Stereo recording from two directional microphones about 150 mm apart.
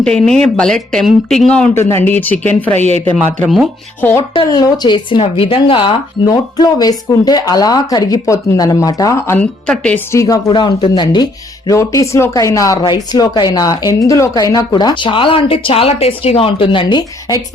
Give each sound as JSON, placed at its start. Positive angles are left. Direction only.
{"t": 0.0, "sound": "speech", "side_deg": 5}
{"t": 4.4, "sound": "speech", "side_deg": 25}
{"t": 10.1, "sound": "speech", "side_deg": 20}
{"t": 12.8, "sound": "speech", "side_deg": 30}